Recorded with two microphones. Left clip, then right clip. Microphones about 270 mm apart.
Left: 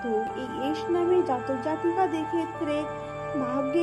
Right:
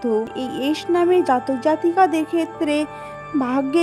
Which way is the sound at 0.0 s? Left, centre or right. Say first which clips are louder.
Right 6 dB; right.